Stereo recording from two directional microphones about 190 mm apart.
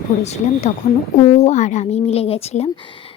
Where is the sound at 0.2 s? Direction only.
35° left (ahead or behind).